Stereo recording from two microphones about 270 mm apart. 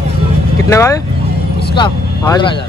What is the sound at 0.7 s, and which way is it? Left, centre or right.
Speech, centre.